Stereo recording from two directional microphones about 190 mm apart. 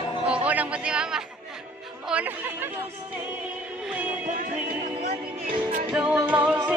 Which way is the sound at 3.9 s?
10° right (ahead or behind).